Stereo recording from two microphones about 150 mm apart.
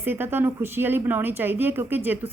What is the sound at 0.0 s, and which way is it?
A woman's voice, 15° right (ahead or behind).